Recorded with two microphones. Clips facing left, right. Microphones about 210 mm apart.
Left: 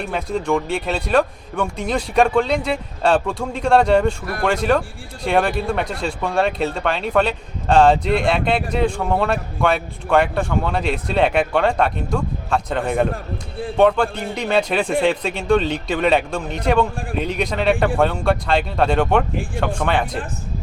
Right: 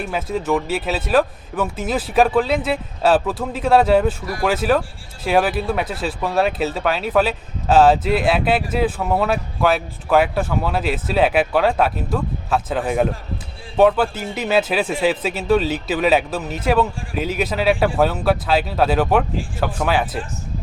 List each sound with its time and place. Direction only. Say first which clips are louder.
0.0 s speech: even; 5° right (ahead or behind)